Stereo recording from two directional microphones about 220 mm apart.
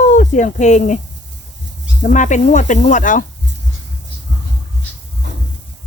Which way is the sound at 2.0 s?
35° left (ahead or behind).